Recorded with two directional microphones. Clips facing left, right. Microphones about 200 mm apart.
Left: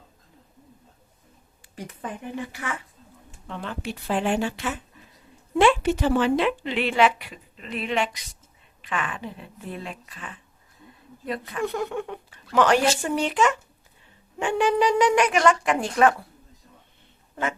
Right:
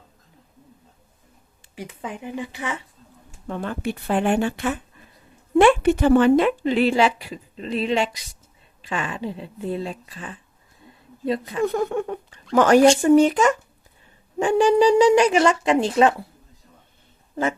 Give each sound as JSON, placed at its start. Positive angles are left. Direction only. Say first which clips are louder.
{"t": 1.7, "sound": "speech", "louder": "right 2 dB", "side_deg": -10}
{"t": 3.4, "sound": "a woman's voice", "louder": "right 6 dB", "side_deg": -45}
{"t": 11.6, "sound": "a woman's voice", "louder": "right 5 dB", "side_deg": -45}